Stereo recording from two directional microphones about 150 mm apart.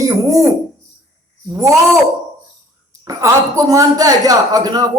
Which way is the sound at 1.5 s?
20° right (ahead or behind).